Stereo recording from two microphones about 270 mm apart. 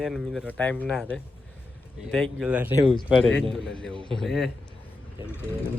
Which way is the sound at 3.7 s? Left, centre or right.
Centre.